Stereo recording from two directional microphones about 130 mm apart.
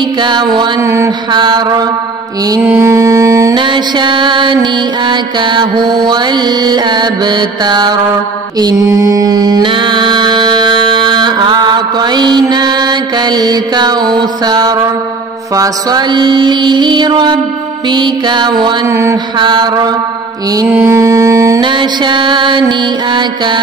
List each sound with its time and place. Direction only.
0.2 s mantra: 35° right (ahead or behind)
0.8 s mantra: 20° right (ahead or behind)
1.3 s mantra: 35° right (ahead or behind)
2.5 s mantra: 20° right (ahead or behind)
3.5 s mantra: 35° right (ahead or behind)
18.9 s mantra: 20° right (ahead or behind)
19.3 s mantra: 35° right (ahead or behind)
20.6 s mantra: 20° right (ahead or behind)
21.5 s mantra: 35° right (ahead or behind)